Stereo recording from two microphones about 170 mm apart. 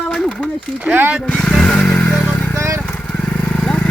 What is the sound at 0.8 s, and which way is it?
Speech, 10° right (ahead or behind).